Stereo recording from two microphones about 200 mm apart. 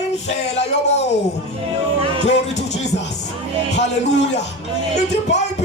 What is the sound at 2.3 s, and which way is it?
Music, 35° left (ahead or behind).